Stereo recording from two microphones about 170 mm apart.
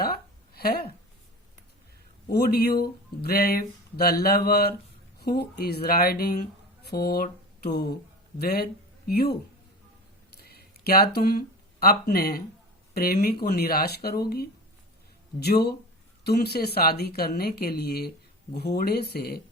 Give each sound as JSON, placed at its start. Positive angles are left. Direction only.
{"t": 0.5, "sound": "speech", "side_deg": 65}
{"t": 2.3, "sound": "a woman's voice", "side_deg": 65}
{"t": 10.3, "sound": "a sound", "side_deg": 65}
{"t": 12.9, "sound": "a woman's voice", "side_deg": 65}